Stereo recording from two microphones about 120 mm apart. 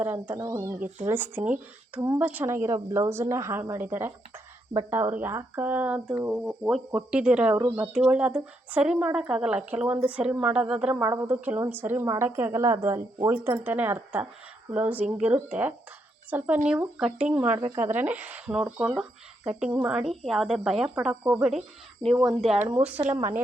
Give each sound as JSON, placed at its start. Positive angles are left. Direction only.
{"t": 0.0, "sound": "a woman's voice", "side_deg": -15}
{"t": 11.0, "sound": "a woman's voice", "side_deg": -20}
{"t": 22.6, "sound": "a woman's voice", "side_deg": -15}